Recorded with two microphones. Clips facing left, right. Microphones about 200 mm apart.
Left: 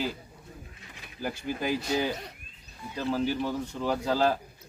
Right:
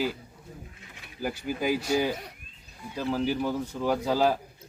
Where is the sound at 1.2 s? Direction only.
10° right (ahead or behind).